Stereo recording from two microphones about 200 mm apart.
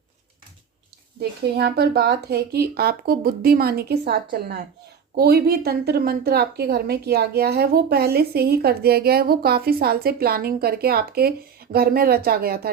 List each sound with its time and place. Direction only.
1.2 s a woman's voice: 55° right (ahead or behind)